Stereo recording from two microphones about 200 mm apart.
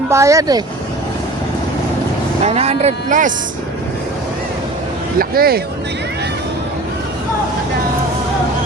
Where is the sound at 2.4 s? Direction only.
30° right (ahead or behind).